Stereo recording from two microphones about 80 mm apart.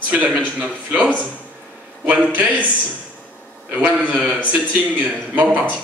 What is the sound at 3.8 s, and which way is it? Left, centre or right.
A man's voice, centre.